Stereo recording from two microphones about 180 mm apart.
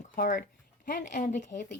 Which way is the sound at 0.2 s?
50° left (ahead or behind).